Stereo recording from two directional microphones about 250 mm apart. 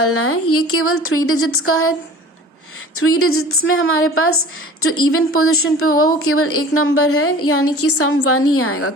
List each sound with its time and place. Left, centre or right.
0.0 s a woman's voice: left
2.9 s a woman's voice: left